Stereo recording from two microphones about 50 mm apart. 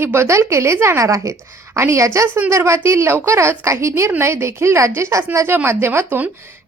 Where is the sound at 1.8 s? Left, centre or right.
Right.